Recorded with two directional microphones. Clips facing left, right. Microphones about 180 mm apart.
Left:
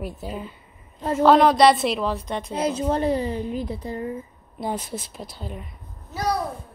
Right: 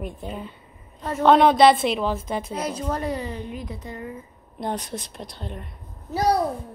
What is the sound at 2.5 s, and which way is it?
Speech, 25° left (ahead or behind).